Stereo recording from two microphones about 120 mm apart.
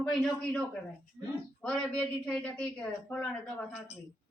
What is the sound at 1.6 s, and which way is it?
A woman's voice, 10° left (ahead or behind).